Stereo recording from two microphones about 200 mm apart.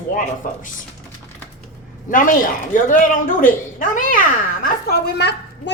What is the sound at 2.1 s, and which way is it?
Speech, 40° left (ahead or behind).